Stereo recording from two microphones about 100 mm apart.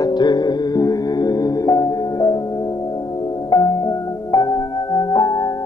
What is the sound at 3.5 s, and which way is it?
Music, 40° left (ahead or behind).